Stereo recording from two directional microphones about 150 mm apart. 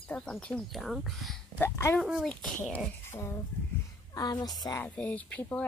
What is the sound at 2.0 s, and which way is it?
Speech, centre (ahead or behind).